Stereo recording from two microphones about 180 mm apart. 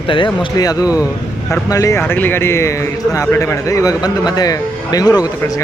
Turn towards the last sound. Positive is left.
turn(degrees=20)  # may be behind; listen again after turning